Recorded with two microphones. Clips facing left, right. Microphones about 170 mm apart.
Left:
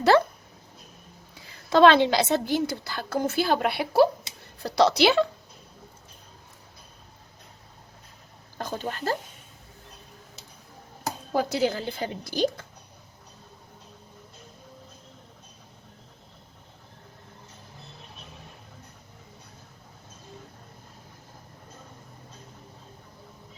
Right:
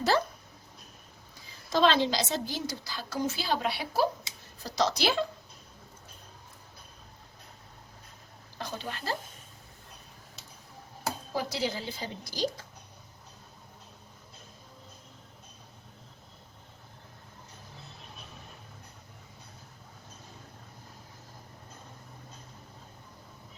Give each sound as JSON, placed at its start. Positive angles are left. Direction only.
{"t": 0.1, "sound": "speech", "side_deg": 75}
{"t": 1.5, "sound": "a woman's voice", "side_deg": 60}
{"t": 8.5, "sound": "speech", "side_deg": 45}
{"t": 11.3, "sound": "a woman's voice", "side_deg": 55}